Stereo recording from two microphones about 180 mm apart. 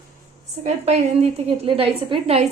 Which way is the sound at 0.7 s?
35° right (ahead or behind).